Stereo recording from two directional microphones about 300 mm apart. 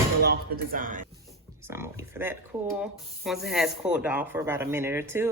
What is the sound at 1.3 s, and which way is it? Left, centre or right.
Speech, centre.